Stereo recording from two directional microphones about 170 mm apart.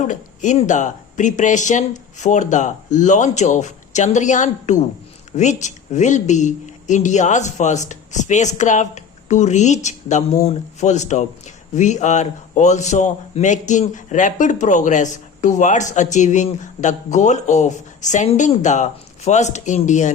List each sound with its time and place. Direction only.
0.1 s a woman's voice: 45° left (ahead or behind)